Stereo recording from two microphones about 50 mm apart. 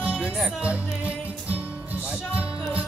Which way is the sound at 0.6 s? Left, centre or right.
Right.